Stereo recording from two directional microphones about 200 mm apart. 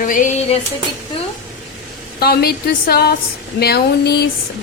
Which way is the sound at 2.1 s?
50° left (ahead or behind).